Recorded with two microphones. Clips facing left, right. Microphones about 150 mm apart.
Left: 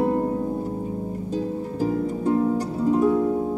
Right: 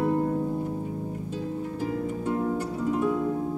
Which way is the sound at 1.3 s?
35° left (ahead or behind).